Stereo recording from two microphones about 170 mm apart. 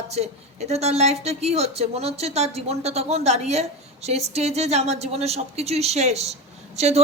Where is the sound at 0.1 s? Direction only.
40° right (ahead or behind).